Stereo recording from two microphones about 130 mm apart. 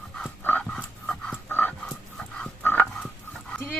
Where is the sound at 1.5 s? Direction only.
15° left (ahead or behind).